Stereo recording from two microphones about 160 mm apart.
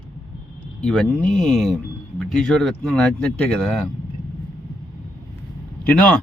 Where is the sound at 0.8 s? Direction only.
5° left (ahead or behind).